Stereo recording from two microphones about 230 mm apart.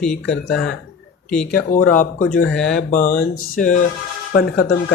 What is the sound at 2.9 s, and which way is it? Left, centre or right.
Speech, left.